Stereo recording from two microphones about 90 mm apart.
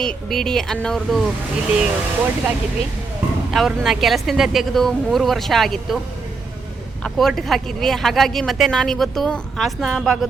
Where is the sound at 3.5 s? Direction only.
Centre (ahead or behind).